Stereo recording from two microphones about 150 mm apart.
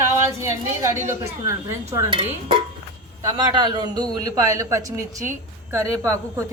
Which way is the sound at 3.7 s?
25° right (ahead or behind).